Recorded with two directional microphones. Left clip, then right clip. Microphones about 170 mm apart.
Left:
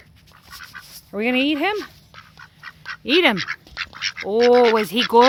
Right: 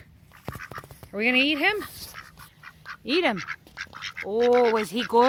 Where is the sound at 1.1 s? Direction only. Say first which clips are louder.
Left 2 dB; 30° left (ahead or behind).